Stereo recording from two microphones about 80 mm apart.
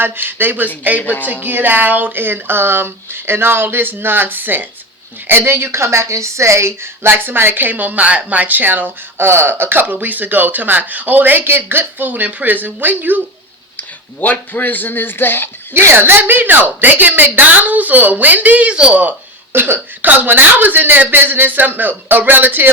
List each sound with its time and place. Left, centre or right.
0.0 s a woman's voice: right
13.7 s a man's voice: left
15.7 s a woman's voice: right; by 19.1 s centre
19.5 s a woman's voice: right